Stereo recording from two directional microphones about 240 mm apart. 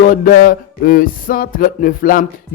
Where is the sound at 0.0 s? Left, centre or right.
Left.